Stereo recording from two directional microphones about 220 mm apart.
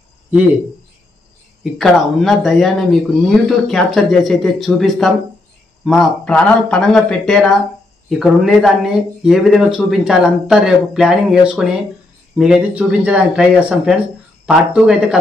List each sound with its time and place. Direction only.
1.6 s speech: centre (ahead or behind)